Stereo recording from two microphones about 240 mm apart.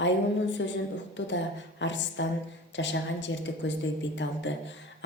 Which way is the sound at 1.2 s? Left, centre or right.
Left.